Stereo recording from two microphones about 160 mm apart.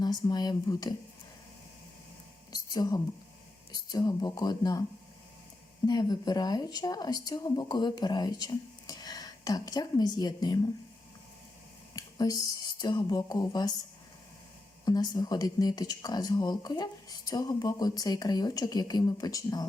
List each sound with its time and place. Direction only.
0.0 s speech: 25° left (ahead or behind)
2.5 s a sound: 25° left (ahead or behind)
3.9 s speech: 25° left (ahead or behind)
5.8 s speech: 25° left (ahead or behind)
11.9 s speech: 25° left (ahead or behind)
14.8 s speech: 25° left (ahead or behind)